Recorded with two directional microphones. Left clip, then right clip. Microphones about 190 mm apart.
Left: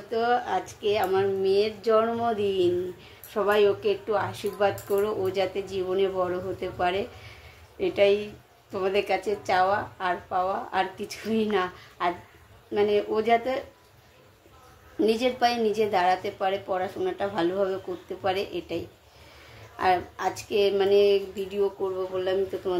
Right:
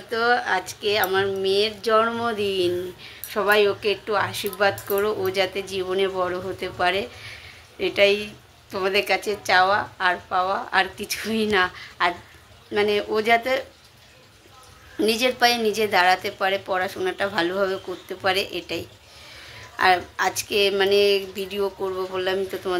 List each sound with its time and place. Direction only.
0.1 s a woman's voice: centre (ahead or behind)
15.0 s a woman's voice: centre (ahead or behind)
19.8 s a woman's voice: centre (ahead or behind)